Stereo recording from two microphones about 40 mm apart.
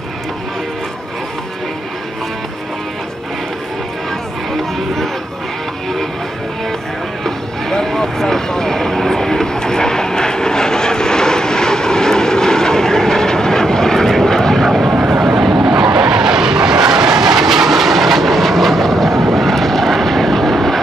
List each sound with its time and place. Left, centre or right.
4.7 s a sound: centre
7.2 s vehicle: centre
15.0 s vehicle: centre